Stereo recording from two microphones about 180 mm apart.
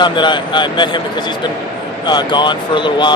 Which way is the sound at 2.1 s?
25° left (ahead or behind).